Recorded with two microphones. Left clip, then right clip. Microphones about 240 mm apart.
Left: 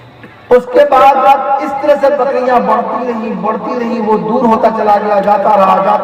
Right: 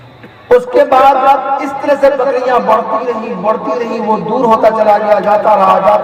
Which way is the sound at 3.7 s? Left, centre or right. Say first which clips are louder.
Right 1 dB; right.